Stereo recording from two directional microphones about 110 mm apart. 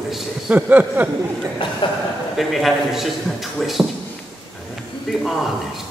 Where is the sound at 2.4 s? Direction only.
Centre (ahead or behind).